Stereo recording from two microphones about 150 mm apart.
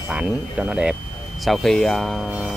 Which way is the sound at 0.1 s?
5° right (ahead or behind).